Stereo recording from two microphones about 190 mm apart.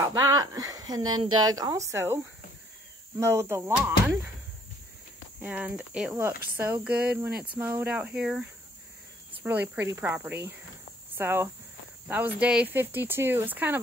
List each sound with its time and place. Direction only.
0.0 s speech: 20° right (ahead or behind)
3.2 s speech: 15° right (ahead or behind)
5.4 s speech: 5° right (ahead or behind)